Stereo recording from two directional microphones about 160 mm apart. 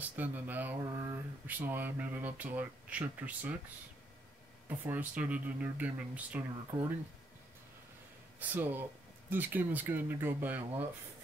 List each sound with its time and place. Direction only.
0.0 s speech: 10° right (ahead or behind)
4.6 s speech: 10° right (ahead or behind)
8.4 s speech: 10° right (ahead or behind)